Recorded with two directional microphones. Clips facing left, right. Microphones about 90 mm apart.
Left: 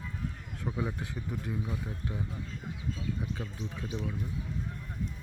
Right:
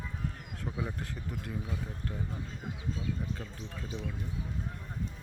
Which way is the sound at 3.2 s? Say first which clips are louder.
Left 2 dB; 10° left (ahead or behind).